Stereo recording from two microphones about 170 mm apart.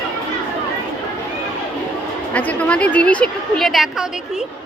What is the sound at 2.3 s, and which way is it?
A woman's voice, 10° left (ahead or behind).